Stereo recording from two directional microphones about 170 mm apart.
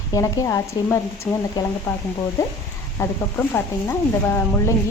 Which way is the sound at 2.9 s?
15° left (ahead or behind).